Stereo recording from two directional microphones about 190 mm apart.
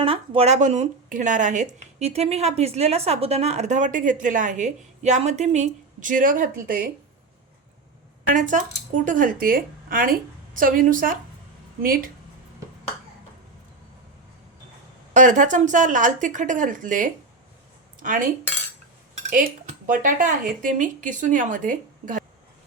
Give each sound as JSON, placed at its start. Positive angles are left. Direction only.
{"t": 0.0, "sound": "speech", "side_deg": -30}
{"t": 8.4, "sound": "speech", "side_deg": -40}
{"t": 15.1, "sound": "speech", "side_deg": -40}
{"t": 18.0, "sound": "cutlery", "side_deg": -45}
{"t": 19.3, "sound": "speech", "side_deg": -45}